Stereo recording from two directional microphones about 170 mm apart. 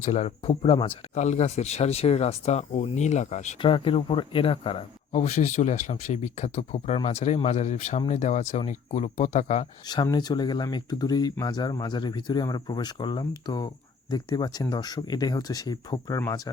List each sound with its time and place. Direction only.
0.0 s speech: 40° left (ahead or behind)
3.6 s speech: 30° left (ahead or behind)
5.1 s speech: 40° left (ahead or behind)
9.9 s speech: 25° left (ahead or behind)